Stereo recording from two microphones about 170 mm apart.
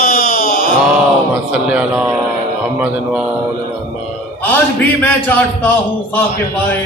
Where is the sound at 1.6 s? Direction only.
5° right (ahead or behind).